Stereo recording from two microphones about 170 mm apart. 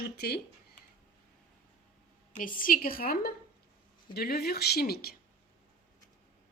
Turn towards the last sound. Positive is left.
turn(degrees=65)  # may be behind; listen again after turning